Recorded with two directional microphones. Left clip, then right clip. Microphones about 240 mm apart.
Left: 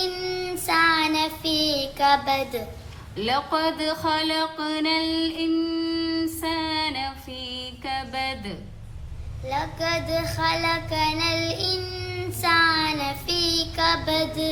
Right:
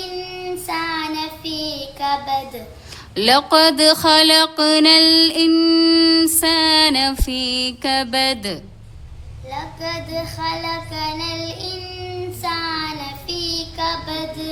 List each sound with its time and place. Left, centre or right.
0.7 s child singing: left
3.2 s mantra: right
9.5 s child singing: left